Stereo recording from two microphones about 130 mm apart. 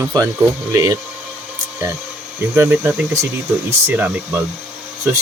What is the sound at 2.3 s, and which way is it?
Speech, 15° right (ahead or behind).